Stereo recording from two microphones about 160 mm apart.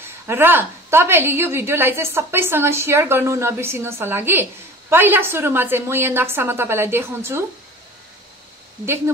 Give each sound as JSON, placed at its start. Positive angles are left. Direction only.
{"t": 0.3, "sound": "a woman's voice", "side_deg": -15}
{"t": 8.8, "sound": "a woman's voice", "side_deg": -15}